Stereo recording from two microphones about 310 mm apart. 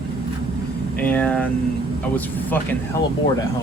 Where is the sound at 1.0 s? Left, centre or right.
Centre.